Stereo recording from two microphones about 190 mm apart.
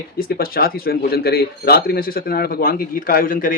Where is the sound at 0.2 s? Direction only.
50° left (ahead or behind).